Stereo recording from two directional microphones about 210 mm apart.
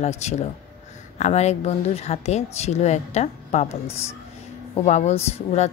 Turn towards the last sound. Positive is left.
turn(degrees=30)  # may be behind; listen again after turning